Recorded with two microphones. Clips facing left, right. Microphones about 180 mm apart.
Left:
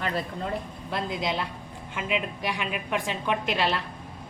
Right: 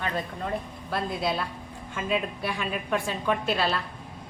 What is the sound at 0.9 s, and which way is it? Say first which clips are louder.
A woman's voice: right 1 dB; 20° left (ahead or behind).